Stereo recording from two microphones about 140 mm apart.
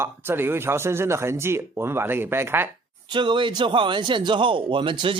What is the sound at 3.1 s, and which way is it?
A man's voice, 35° right (ahead or behind).